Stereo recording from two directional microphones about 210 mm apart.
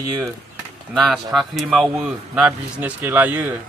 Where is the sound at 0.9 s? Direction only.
Centre (ahead or behind).